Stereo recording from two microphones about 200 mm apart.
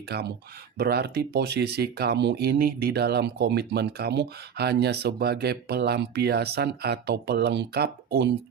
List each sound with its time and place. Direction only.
0.1 s speech: 55° right (ahead or behind)